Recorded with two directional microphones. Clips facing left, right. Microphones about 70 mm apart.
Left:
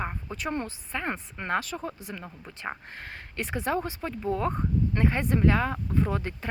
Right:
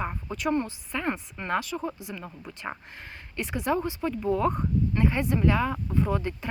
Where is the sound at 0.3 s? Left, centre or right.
Left.